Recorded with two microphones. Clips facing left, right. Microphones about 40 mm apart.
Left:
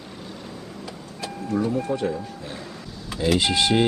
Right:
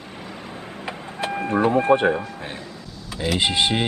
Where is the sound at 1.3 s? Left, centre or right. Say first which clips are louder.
Right 5 dB; right.